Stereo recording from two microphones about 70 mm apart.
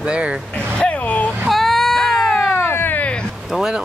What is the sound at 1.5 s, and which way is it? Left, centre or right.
Baby cry, centre.